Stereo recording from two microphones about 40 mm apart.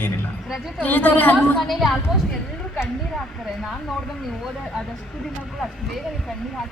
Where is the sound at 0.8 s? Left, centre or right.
Left.